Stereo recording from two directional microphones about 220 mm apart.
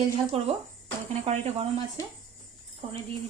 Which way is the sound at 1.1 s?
30° right (ahead or behind).